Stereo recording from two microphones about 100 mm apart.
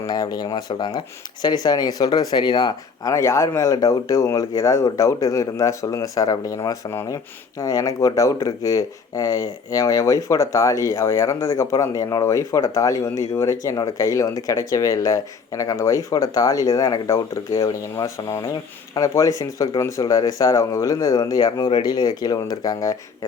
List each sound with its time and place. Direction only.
0.0 s speech: 40° left (ahead or behind)
3.1 s speech: 30° left (ahead or behind)